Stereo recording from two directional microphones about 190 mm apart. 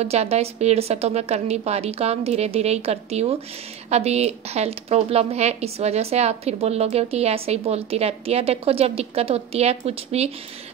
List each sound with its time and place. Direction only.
0.0 s a woman's voice: 35° right (ahead or behind)